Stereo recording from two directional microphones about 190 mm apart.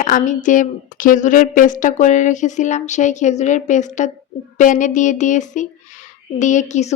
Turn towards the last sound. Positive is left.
turn(degrees=40)  # may be behind; listen again after turning